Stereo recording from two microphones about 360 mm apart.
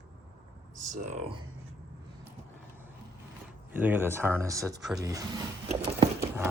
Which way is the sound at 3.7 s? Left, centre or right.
Centre.